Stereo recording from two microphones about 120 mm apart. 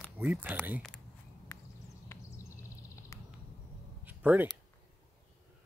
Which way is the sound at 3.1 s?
25° left (ahead or behind).